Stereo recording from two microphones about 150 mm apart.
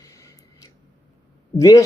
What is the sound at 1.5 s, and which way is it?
Speech, 20° left (ahead or behind).